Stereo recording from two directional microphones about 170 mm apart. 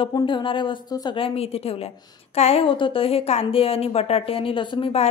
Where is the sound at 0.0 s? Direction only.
25° left (ahead or behind).